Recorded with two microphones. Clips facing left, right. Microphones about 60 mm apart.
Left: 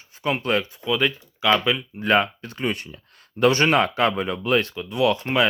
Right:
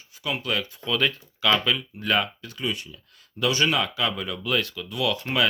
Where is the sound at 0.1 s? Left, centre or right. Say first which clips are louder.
Left 5 dB; left.